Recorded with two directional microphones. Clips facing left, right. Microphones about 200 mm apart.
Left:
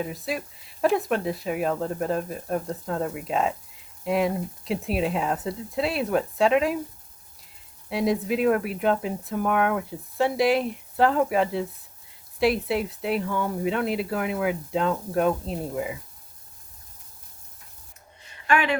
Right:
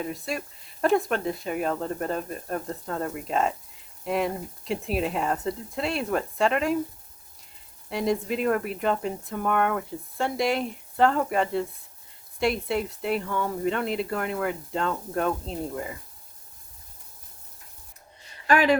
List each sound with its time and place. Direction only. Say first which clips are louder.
0.0 s speech: left 1 dB; centre (ahead or behind)
7.9 s speech: left 2 dB; centre (ahead or behind)
18.4 s speech: right 3 dB; 40° right (ahead or behind)